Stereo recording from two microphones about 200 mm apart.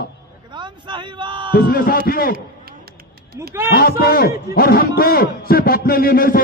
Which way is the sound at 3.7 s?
50° left (ahead or behind).